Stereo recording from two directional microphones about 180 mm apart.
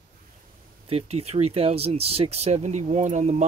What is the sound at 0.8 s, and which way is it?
Speech, 35° right (ahead or behind).